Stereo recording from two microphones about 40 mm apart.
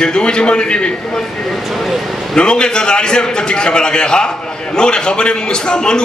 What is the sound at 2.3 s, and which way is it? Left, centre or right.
A man's voice, left.